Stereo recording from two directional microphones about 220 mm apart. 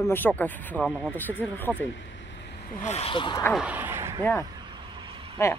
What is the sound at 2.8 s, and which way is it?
Speech, 30° left (ahead or behind).